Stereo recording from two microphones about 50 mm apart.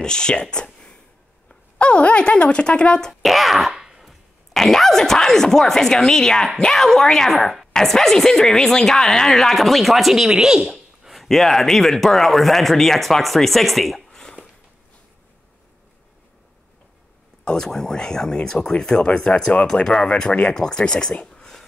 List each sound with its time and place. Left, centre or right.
0.0 s speech: centre
3.1 s a woman's voice: centre
17.5 s speech: centre